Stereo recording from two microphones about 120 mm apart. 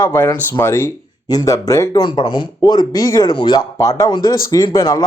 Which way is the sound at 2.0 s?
40° left (ahead or behind).